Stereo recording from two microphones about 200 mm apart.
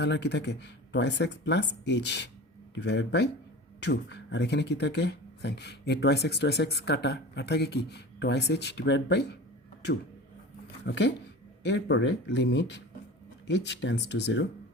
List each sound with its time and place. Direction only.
0.0 s speech: 60° left (ahead or behind)
10.8 s speech: 60° left (ahead or behind)